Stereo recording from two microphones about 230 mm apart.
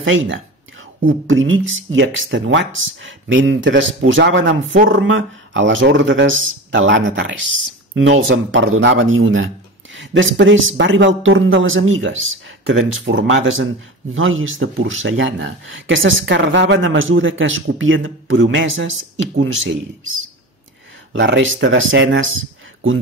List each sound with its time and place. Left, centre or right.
1.0 s speech: right
21.1 s speech: right